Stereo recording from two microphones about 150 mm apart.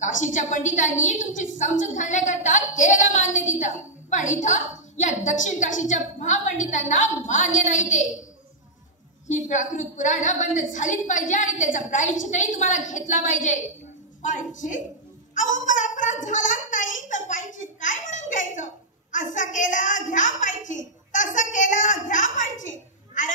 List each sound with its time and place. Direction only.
0.0 s a woman's voice: 55° left (ahead or behind)
9.3 s a woman's voice: 55° left (ahead or behind)